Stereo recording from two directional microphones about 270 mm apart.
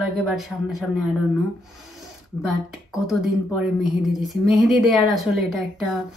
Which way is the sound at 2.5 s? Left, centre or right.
Centre.